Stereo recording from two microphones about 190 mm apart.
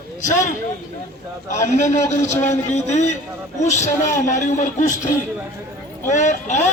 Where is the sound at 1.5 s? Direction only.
40° left (ahead or behind).